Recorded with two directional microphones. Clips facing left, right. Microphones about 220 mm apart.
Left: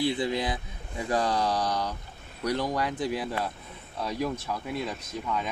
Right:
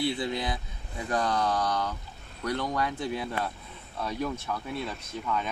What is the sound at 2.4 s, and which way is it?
Speech, 15° left (ahead or behind).